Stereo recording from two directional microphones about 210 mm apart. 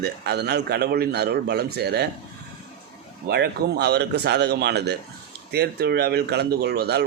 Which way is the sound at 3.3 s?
50° right (ahead or behind).